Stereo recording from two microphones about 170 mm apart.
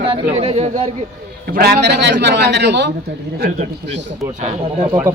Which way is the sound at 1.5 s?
65° right (ahead or behind).